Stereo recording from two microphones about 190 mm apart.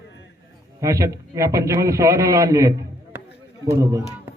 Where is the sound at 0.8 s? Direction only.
15° right (ahead or behind).